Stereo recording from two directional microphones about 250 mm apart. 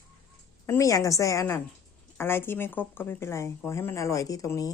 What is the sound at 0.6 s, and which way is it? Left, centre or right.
Speech, centre.